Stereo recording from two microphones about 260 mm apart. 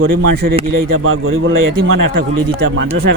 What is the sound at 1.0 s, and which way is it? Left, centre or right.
A man's voice, right.